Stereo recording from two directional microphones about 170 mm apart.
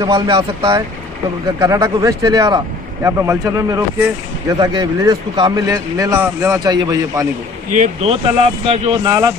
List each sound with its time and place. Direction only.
0.0 s speech: 25° right (ahead or behind)
7.7 s speech: 45° right (ahead or behind)
8.1 s speech: 35° right (ahead or behind)